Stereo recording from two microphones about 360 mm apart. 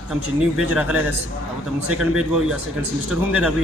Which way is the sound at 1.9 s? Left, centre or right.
Centre.